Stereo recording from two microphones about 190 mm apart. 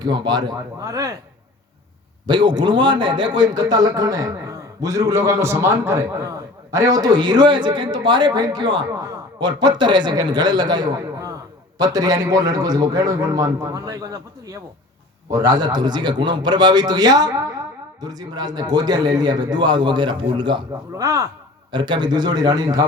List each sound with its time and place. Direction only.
0.0 s a man's voice: 20° right (ahead or behind)
2.2 s a man's voice: 25° right (ahead or behind)